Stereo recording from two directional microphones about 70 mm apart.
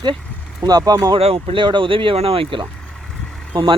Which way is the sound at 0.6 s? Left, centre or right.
Right.